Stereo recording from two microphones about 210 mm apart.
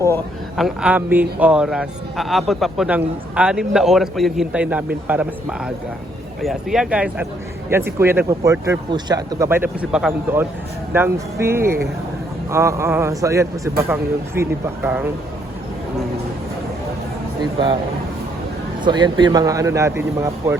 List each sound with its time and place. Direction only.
0.5 s a man's voice: centre (ahead or behind)
18.9 s speech: 20° right (ahead or behind)